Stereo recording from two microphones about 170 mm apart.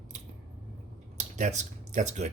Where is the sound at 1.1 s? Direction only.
45° right (ahead or behind).